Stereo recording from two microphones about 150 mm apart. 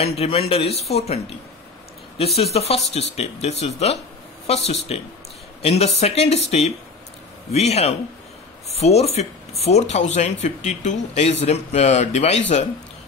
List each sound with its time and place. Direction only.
0.0 s speech: 40° left (ahead or behind)